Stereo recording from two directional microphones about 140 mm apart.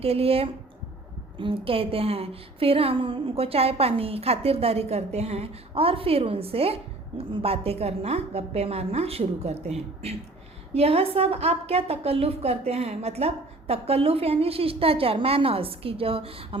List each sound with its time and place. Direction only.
0.0 s a woman's voice: 45° right (ahead or behind)
10.8 s a woman's voice: 45° right (ahead or behind)